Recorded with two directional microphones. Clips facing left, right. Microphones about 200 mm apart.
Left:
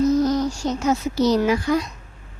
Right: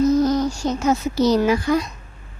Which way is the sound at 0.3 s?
50° right (ahead or behind).